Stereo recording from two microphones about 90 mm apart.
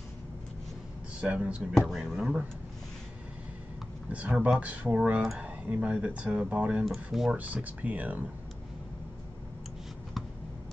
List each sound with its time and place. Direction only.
1.2 s speech: 10° right (ahead or behind)
1.7 s speech: 5° left (ahead or behind)
4.1 s speech: 15° right (ahead or behind)
7.3 s speech: 15° right (ahead or behind)